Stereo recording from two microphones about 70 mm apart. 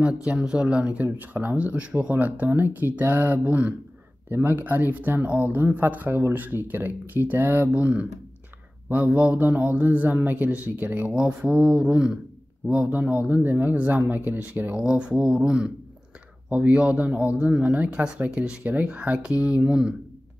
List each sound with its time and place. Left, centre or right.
0.0 s speech: centre
11.1 s speech: centre